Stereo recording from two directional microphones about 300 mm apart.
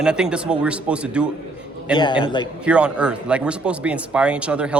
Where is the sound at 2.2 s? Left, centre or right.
Centre.